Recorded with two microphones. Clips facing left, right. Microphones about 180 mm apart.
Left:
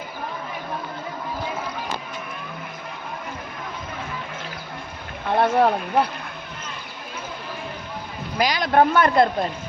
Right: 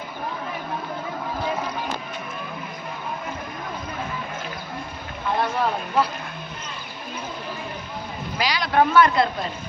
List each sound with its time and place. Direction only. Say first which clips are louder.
5.4 s speech: left 7 dB; 60° left (ahead or behind)
8.4 s a man's voice: left 3 dB; 50° left (ahead or behind)